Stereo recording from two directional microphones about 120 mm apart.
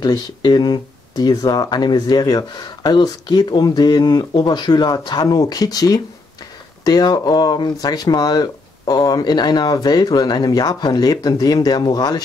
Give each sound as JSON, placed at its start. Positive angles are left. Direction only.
{"t": 0.0, "sound": "speech", "side_deg": 35}